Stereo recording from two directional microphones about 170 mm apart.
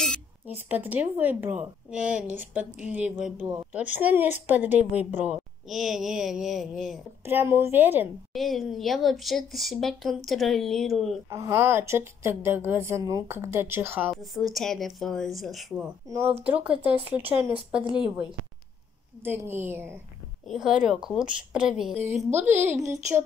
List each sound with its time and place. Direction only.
0.7 s speech: 10° right (ahead or behind)
7.2 s speech: 15° right (ahead or behind)
8.3 s a woman's voice: centre (ahead or behind)
11.2 s speech: 15° right (ahead or behind)
14.1 s a woman's voice: centre (ahead or behind)
16.1 s a woman's voice: 15° right (ahead or behind)